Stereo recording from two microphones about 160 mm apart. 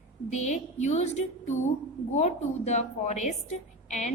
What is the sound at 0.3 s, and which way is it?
A woman's voice, 45° left (ahead or behind).